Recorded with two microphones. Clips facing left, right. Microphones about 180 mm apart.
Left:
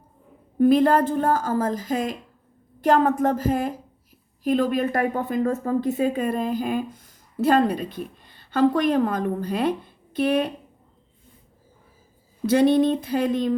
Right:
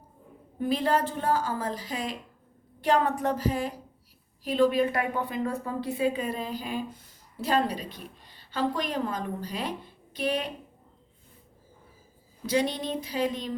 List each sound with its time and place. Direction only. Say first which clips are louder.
0.6 s a woman's voice: left 9 dB; 55° left (ahead or behind)
12.5 s a woman's voice: left 10 dB; 55° left (ahead or behind)